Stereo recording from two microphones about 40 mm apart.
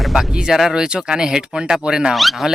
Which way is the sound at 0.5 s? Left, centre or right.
Centre.